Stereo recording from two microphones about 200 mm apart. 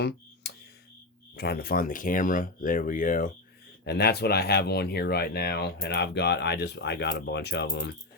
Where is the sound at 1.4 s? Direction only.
50° left (ahead or behind).